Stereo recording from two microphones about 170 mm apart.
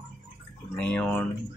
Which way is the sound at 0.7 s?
5° left (ahead or behind).